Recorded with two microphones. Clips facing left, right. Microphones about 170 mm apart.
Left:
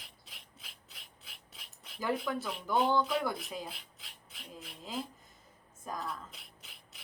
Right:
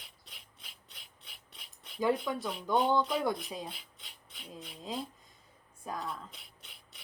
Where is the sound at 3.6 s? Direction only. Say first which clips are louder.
Right 1 dB; centre (ahead or behind).